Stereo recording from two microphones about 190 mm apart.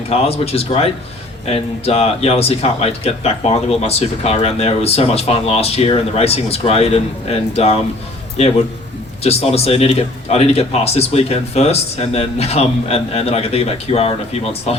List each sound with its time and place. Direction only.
0.1 s speech: 30° left (ahead or behind)
9.2 s speech: 30° left (ahead or behind)